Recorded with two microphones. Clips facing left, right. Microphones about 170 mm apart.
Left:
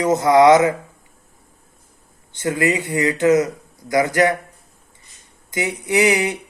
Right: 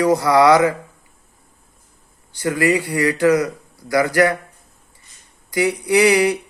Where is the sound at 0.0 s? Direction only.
20° left (ahead or behind).